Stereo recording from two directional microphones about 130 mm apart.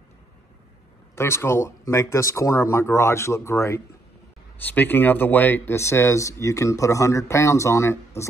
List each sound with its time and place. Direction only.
1.1 s speech: 20° left (ahead or behind)